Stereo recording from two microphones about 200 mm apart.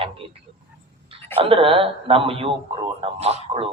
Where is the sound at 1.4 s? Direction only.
25° right (ahead or behind).